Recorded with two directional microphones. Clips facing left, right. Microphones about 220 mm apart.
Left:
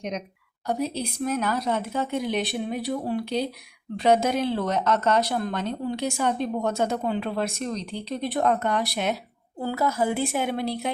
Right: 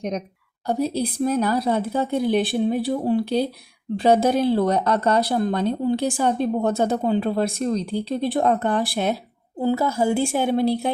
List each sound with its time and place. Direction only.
0.7 s a woman's voice: 35° right (ahead or behind)